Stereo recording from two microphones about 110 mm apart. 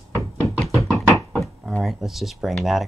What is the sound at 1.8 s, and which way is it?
Speech, 5° right (ahead or behind).